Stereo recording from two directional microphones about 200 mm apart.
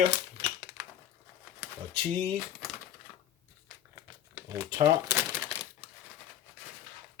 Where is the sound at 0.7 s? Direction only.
5° right (ahead or behind).